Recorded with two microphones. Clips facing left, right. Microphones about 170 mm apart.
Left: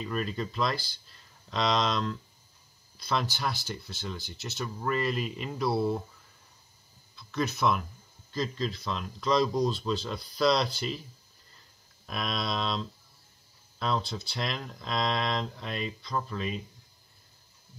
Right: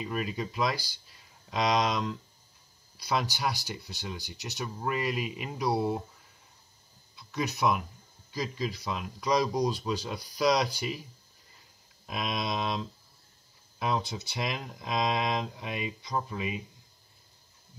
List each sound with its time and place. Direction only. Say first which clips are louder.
0.0 s speech: left 1 dB; 10° right (ahead or behind)
7.2 s speech: left 1 dB; 15° right (ahead or behind)
12.1 s speech: even; 20° right (ahead or behind)